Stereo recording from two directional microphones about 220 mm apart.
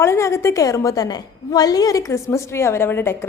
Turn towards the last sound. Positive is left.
turn(degrees=10)  # may be behind; listen again after turning